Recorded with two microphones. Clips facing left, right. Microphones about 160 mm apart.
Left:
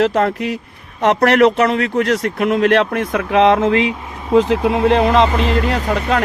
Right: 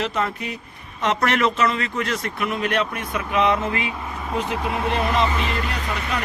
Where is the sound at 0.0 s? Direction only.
85° left.